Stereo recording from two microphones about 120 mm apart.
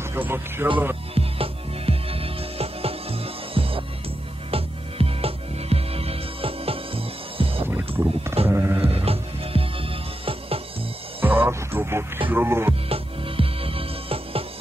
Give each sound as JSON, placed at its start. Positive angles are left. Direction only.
{"t": 0.1, "sound": "speech", "side_deg": -20}
{"t": 1.1, "sound": "music", "side_deg": -55}
{"t": 8.0, "sound": "a sound", "side_deg": -20}
{"t": 8.5, "sound": "music", "side_deg": -20}
{"t": 8.8, "sound": "music", "side_deg": -55}
{"t": 11.2, "sound": "music", "side_deg": -15}
{"t": 12.3, "sound": "speech", "side_deg": -20}
{"t": 12.8, "sound": "music", "side_deg": -50}